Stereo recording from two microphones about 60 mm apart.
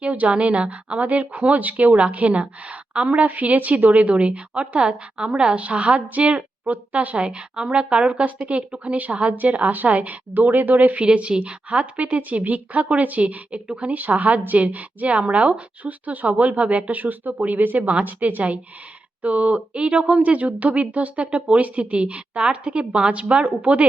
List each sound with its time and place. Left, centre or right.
0.0 s a woman's voice: right